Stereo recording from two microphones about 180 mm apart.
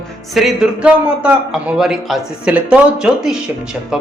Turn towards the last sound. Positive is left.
turn(degrees=-5)  # may be behind; listen again after turning